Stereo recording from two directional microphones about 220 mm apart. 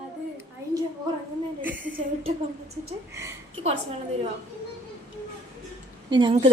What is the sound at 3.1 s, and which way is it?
Speech, 15° right (ahead or behind).